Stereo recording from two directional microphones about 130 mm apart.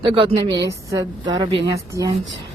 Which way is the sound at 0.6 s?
25° right (ahead or behind).